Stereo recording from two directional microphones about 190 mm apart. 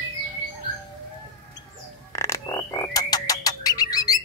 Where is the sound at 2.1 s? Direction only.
15° left (ahead or behind).